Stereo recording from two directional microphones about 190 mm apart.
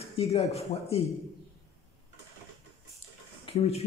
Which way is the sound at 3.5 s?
35° left (ahead or behind).